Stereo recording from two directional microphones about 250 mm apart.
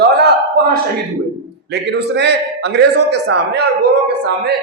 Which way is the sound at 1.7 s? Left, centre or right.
Right.